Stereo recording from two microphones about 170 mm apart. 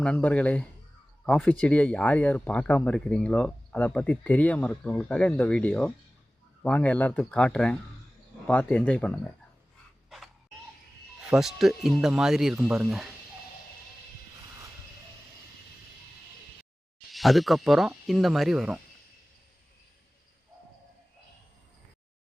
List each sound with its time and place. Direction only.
0.0 s speech: 10° left (ahead or behind)
11.2 s speech: 5° right (ahead or behind)
17.1 s speech: centre (ahead or behind)